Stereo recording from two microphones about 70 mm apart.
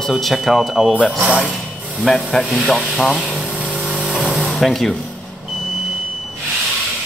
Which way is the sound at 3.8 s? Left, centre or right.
Centre.